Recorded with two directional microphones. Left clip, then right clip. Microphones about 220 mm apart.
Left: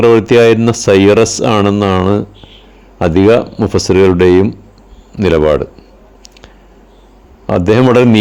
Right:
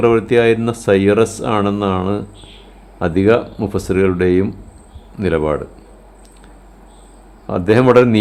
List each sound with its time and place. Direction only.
0.0 s speech: 25° left (ahead or behind)
7.4 s speech: 25° left (ahead or behind)